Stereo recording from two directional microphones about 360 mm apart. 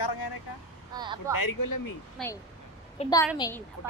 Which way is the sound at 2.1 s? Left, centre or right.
Centre.